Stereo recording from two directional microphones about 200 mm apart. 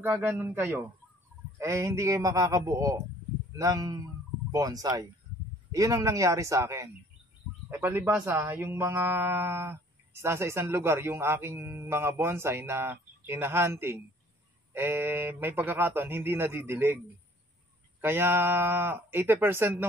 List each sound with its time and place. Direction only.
0.0 s speech: 10° right (ahead or behind)
18.0 s speech: 10° right (ahead or behind)